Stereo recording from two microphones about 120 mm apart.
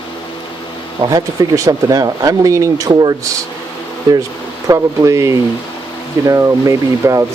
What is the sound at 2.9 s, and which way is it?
Speech, 40° right (ahead or behind).